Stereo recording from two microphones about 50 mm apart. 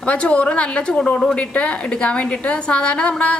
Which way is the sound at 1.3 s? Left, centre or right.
Left.